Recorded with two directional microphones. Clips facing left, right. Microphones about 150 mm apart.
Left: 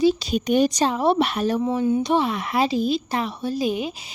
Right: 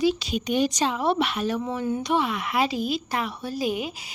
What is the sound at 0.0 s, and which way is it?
Speech, 35° left (ahead or behind).